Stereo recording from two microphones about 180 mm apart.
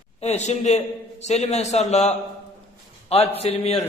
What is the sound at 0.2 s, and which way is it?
A man's voice, 40° left (ahead or behind).